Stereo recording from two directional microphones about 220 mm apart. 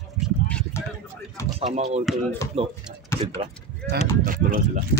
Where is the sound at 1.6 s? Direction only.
30° right (ahead or behind).